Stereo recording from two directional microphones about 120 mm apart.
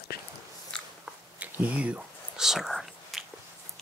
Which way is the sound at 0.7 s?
5° left (ahead or behind).